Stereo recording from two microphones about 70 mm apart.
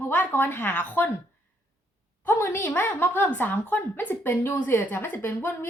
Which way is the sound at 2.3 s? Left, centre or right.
Left.